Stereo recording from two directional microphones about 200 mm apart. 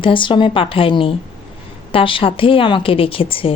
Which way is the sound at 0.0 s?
25° left (ahead or behind).